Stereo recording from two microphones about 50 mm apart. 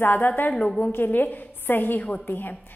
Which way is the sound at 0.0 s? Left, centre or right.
Left.